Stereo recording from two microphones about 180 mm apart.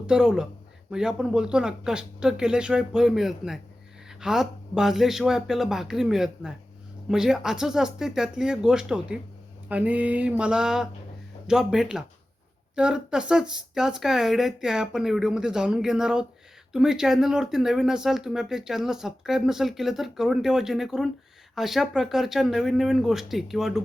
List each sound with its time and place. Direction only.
0.1 s speech: 5° right (ahead or behind)
9.6 s mantra: 10° right (ahead or behind)
11.4 s speech: 5° right (ahead or behind)